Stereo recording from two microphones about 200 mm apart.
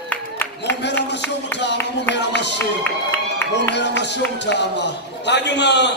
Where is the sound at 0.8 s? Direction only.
60° left (ahead or behind).